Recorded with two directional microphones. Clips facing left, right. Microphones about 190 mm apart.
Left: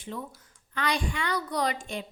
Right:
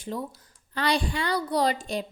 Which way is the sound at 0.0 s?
35° right (ahead or behind).